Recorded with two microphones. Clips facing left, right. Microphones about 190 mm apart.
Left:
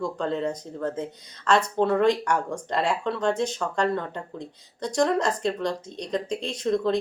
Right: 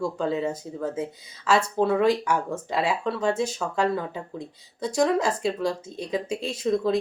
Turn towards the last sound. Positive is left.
turn(degrees=-5)  # may be behind; listen again after turning